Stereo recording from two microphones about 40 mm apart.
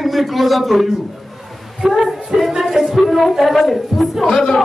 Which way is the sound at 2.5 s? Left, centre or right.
Centre.